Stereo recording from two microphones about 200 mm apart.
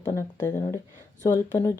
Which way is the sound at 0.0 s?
15° left (ahead or behind).